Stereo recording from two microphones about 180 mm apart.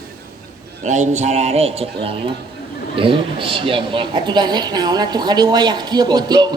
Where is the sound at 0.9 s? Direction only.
40° right (ahead or behind).